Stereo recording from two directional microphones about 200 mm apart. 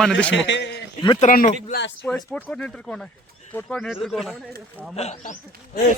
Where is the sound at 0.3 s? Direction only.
65° left (ahead or behind).